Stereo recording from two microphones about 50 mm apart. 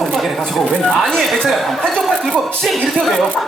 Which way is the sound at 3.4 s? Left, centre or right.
Centre.